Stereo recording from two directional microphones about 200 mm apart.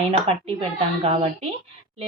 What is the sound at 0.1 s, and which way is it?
Speech, 30° right (ahead or behind).